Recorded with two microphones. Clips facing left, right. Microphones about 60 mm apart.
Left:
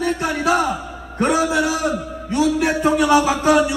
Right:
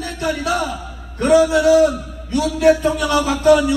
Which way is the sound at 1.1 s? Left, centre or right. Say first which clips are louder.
Right 4 dB; left.